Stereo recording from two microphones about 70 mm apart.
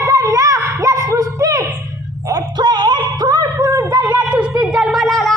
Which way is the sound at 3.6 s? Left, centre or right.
Right.